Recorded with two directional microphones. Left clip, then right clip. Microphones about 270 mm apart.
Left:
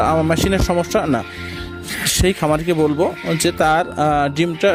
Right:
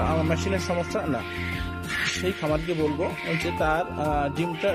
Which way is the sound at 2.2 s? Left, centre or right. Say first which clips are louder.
Left 9 dB; left.